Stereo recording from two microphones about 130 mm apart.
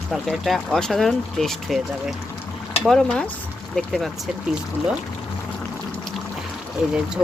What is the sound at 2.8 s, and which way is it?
Speech, 5° left (ahead or behind).